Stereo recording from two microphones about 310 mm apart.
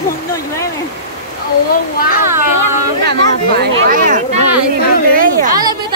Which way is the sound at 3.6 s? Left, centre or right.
Right.